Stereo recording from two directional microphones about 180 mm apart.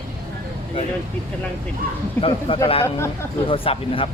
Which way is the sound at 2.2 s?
30° left (ahead or behind).